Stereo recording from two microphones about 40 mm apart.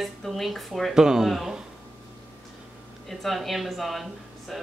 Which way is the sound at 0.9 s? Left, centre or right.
Centre.